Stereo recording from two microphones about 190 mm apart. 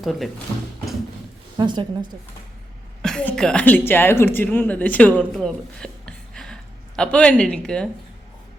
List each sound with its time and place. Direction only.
0.0 s speech: centre (ahead or behind)
1.5 s a woman's voice: 25° right (ahead or behind)
3.0 s a woman's voice: 5° left (ahead or behind)